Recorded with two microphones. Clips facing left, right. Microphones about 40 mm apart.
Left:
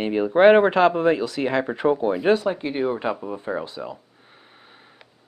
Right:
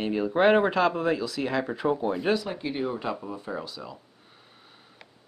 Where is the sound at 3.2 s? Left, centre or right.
Left.